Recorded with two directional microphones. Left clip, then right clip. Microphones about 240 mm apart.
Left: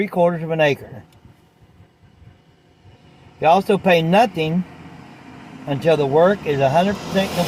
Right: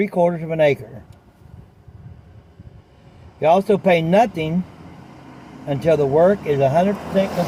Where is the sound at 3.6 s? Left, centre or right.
Left.